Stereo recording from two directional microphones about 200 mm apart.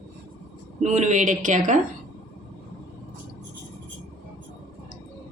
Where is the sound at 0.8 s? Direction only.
40° right (ahead or behind).